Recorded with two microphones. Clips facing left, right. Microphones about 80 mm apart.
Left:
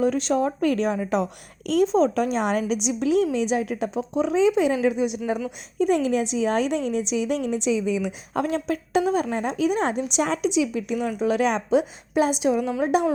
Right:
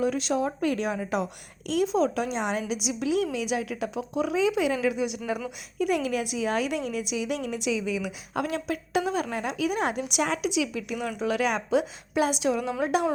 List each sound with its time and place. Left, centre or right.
0.0 s a woman's voice: left